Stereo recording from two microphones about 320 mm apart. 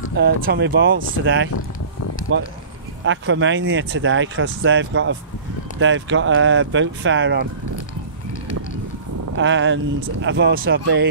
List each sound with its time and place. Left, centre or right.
0.2 s speech: right
3.1 s speech: right
9.4 s speech: right